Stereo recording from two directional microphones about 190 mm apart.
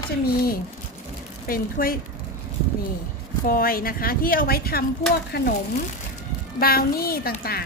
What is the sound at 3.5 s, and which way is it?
A woman's voice, 50° left (ahead or behind).